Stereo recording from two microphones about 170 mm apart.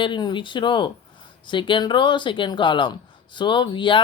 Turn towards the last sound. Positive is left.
turn(degrees=30)  # may be behind; listen again after turning